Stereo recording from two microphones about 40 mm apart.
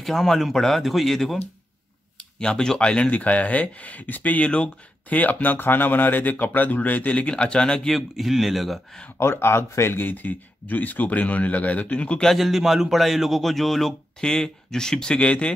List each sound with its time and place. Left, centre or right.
0.0 s a man's voice: centre
2.1 s speech: left
7.1 s speech: left
7.9 s a man's voice: centre
9.2 s speech: left
10.0 s speech: left
12.4 s a man's voice: centre
14.2 s speech: centre